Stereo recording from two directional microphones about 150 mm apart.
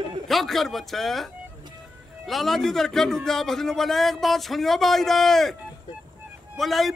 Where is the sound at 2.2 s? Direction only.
Centre (ahead or behind).